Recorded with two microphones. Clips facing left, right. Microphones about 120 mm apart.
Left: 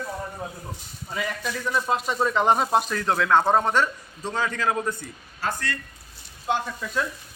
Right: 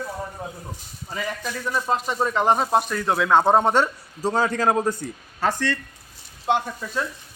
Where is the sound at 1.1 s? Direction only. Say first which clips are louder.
Even; centre (ahead or behind); by 4.3 s 25° right (ahead or behind).